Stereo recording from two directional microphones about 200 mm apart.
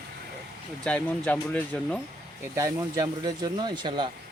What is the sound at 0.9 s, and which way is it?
Speech, 5° left (ahead or behind).